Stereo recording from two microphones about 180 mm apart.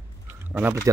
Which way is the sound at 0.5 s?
10° right (ahead or behind).